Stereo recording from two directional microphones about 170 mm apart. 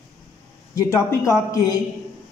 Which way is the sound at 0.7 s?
15° left (ahead or behind).